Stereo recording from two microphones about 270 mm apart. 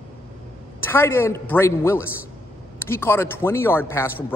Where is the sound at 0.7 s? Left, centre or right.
Centre.